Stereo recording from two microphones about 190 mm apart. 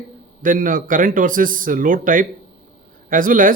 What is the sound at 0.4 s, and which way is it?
Speech, 45° right (ahead or behind).